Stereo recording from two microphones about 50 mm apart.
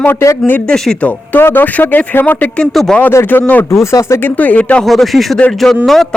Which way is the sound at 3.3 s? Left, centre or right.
Left.